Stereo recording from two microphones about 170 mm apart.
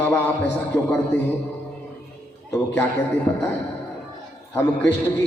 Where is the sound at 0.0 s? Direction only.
15° left (ahead or behind).